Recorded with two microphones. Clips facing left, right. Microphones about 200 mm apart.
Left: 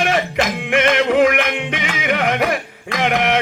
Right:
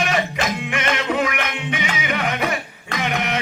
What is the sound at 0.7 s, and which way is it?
Music, 65° left (ahead or behind).